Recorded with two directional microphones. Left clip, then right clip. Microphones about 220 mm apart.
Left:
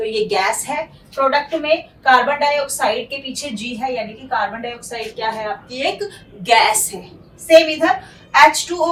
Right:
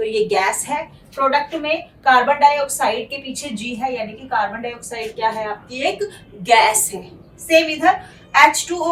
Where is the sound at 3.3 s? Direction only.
Centre (ahead or behind).